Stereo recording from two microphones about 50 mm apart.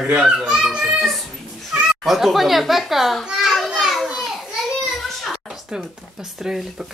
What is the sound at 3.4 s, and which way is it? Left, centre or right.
Children playing, centre.